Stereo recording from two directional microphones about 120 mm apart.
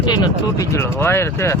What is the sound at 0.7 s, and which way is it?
Speech, 20° left (ahead or behind).